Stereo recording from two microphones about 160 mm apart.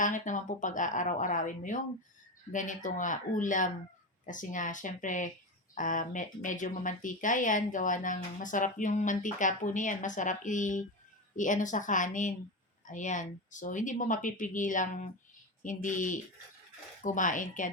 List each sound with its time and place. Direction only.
0.0 s a woman's voice: 50° left (ahead or behind)